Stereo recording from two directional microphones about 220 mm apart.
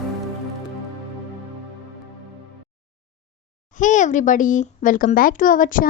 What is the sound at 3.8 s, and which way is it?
Speech, 35° left (ahead or behind).